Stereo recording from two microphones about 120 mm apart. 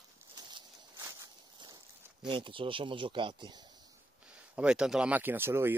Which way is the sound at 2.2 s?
45° right (ahead or behind).